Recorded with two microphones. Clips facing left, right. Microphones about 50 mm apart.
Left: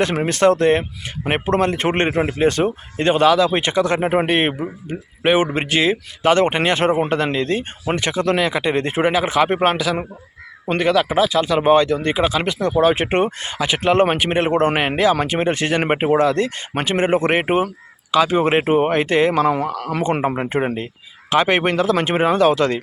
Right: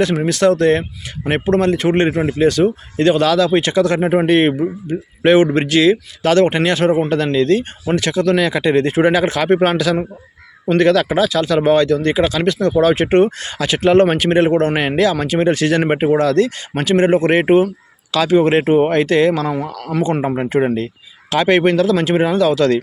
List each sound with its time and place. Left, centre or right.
0.0 s a man's voice: left
8.4 s a man's voice: centre
19.3 s speech: left
20.7 s a man's voice: left